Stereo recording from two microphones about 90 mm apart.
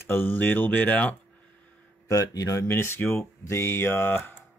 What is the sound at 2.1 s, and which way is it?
Speech, 40° left (ahead or behind).